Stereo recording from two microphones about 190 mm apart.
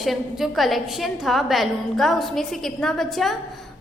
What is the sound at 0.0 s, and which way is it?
A woman's voice, centre (ahead or behind).